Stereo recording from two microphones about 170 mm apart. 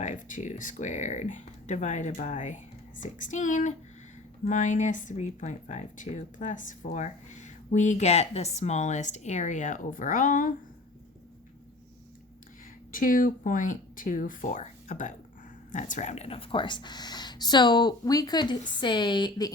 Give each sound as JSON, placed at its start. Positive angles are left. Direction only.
{"t": 0.0, "sound": "speech", "side_deg": 45}
{"t": 12.9, "sound": "speech", "side_deg": 55}